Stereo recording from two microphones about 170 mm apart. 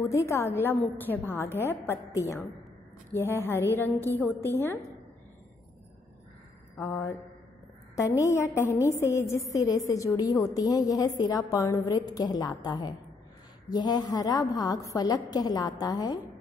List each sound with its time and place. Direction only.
0.0 s a woman's voice: 15° left (ahead or behind)
3.1 s a woman's voice: 15° left (ahead or behind)
6.8 s a woman's voice: 20° left (ahead or behind)